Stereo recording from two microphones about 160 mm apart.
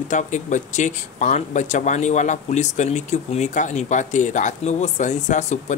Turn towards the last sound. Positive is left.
turn(degrees=45)  # may be behind; listen again after turning